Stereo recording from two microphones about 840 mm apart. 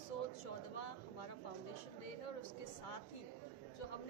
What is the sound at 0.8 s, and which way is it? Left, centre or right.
Speech, left.